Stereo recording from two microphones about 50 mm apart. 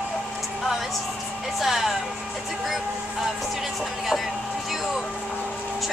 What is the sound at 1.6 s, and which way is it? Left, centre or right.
Speech, centre.